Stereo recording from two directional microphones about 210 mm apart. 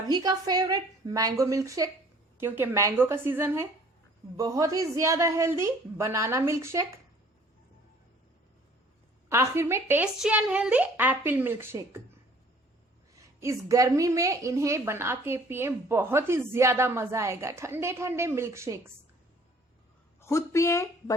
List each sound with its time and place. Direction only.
0.1 s a woman's voice: 20° right (ahead or behind)
9.3 s a woman's voice: 15° right (ahead or behind)
13.1 s a woman's voice: 15° right (ahead or behind)
20.2 s speech: 15° left (ahead or behind)